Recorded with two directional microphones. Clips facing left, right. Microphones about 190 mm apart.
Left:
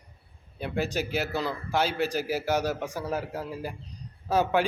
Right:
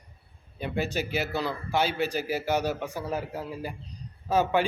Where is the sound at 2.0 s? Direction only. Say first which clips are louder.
Left 1 dB; 10° left (ahead or behind).